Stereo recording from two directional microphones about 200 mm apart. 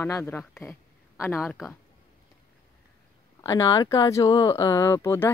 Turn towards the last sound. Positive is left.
turn(degrees=10)  # may be behind; listen again after turning